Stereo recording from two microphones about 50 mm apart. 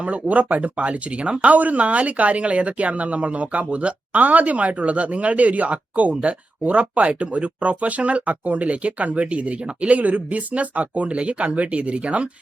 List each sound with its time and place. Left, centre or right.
0.0 s speech: right